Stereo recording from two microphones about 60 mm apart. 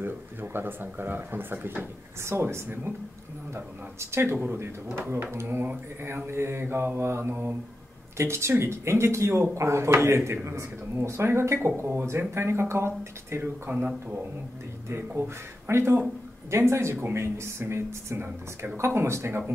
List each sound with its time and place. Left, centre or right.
0.0 s speech: right
4.0 s speech: right
5.3 s speech: right
13.7 s speech: right
14.9 s speech: right